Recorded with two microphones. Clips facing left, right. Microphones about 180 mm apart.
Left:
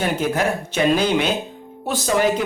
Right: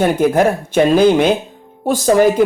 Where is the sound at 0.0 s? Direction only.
50° right (ahead or behind).